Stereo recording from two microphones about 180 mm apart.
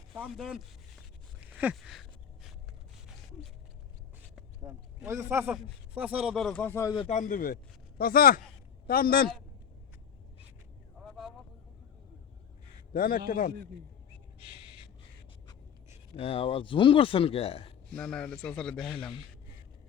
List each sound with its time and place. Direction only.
0.1 s a man's voice: centre (ahead or behind)
1.4 s a sound: 10° right (ahead or behind)
4.9 s a man's voice: 10° right (ahead or behind); by 6.9 s 15° left (ahead or behind)
7.1 s a man's voice: 45° left (ahead or behind)
11.0 s vehicle: centre (ahead or behind)
12.9 s a man's voice: 55° left (ahead or behind)
15.9 s speech: 30° left (ahead or behind)
17.9 s a man's voice: 5° left (ahead or behind)